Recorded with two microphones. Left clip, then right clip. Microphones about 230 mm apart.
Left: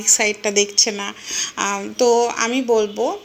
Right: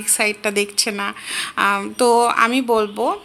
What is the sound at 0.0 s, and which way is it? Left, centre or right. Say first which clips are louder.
A woman's voice: left 2 dB; centre.